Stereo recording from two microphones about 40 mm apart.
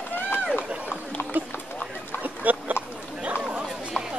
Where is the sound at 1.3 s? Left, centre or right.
Right.